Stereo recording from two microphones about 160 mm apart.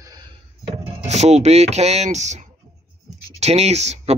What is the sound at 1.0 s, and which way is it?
Speech, 45° right (ahead or behind).